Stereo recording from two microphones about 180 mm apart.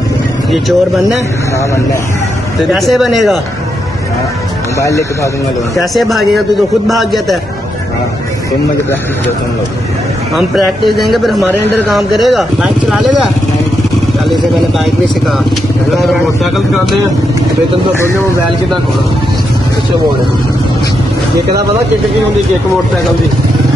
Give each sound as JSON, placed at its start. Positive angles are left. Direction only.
{"t": 0.5, "sound": "speech", "side_deg": 0}
{"t": 2.7, "sound": "speech", "side_deg": 0}
{"t": 4.7, "sound": "speech", "side_deg": 15}
{"t": 5.8, "sound": "speech", "side_deg": 0}
{"t": 10.9, "sound": "speech", "side_deg": 0}
{"t": 15.9, "sound": "speech", "side_deg": 0}